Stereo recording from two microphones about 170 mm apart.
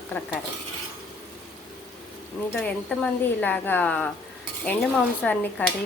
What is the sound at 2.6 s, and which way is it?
A woman's voice, 5° left (ahead or behind).